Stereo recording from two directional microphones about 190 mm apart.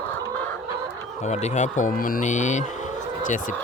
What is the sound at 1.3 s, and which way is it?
Speech, 40° left (ahead or behind).